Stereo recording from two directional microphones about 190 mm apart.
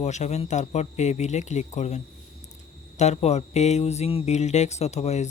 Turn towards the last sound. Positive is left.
turn(degrees=35)  # may be behind; listen again after turning